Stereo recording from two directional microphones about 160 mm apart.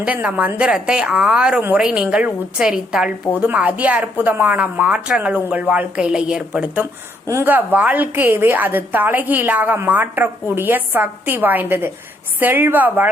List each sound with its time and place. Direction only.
0.0 s a woman's voice: 10° right (ahead or behind)